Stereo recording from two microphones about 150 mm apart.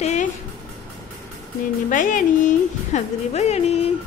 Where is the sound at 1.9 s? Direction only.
60° left (ahead or behind).